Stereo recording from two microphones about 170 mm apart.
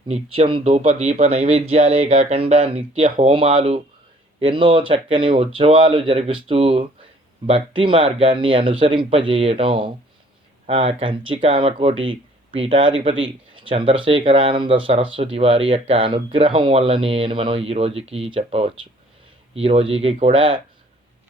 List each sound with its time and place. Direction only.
0.1 s speech: 35° right (ahead or behind)
0.7 s speech: 45° right (ahead or behind)